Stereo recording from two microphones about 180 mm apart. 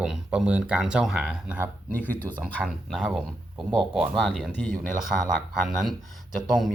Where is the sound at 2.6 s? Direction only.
5° right (ahead or behind).